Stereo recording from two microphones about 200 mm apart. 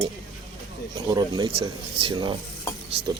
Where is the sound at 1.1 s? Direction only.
20° right (ahead or behind).